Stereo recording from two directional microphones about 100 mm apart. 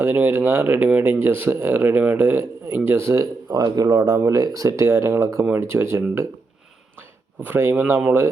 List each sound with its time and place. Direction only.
0.0 s speech: 20° right (ahead or behind)
3.5 s speech: 40° right (ahead or behind)
7.4 s speech: 25° right (ahead or behind)